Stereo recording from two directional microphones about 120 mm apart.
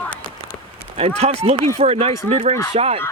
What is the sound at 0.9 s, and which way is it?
Speech, 55° right (ahead or behind).